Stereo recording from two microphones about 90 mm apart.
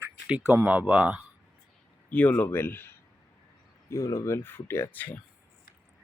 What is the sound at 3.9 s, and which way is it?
Speech, 40° left (ahead or behind).